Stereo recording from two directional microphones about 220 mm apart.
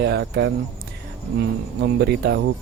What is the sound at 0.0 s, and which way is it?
Speech, 50° right (ahead or behind).